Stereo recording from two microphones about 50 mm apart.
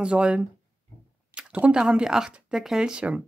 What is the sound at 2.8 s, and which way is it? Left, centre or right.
Speech, right.